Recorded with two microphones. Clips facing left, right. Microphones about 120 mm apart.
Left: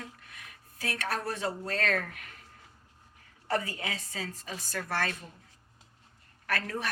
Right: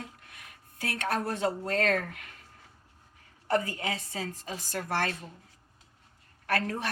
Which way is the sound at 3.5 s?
35° right (ahead or behind).